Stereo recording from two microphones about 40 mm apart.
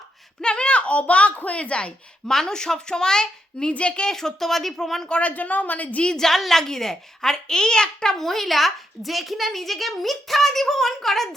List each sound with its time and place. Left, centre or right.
0.4 s a child's voice: left
2.2 s a child's voice: centre
3.7 s speech: left
4.0 s a child's voice: centre
5.0 s speech: left
5.3 s a woman's voice: left
6.1 s a child's voice: centre
8.2 s a child's voice: centre